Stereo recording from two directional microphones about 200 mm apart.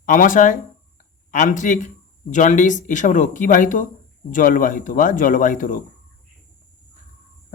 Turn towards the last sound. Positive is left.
turn(degrees=40)  # may be behind; listen again after turning